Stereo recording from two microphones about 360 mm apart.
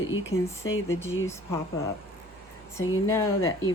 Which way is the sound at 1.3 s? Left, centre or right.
Centre.